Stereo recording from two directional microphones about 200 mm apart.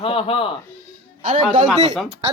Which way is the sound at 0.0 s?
25° left (ahead or behind).